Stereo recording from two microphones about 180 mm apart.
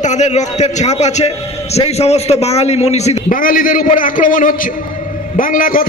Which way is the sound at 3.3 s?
50° left (ahead or behind).